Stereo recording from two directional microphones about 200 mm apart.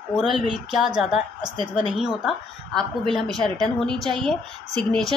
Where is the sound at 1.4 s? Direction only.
25° right (ahead or behind).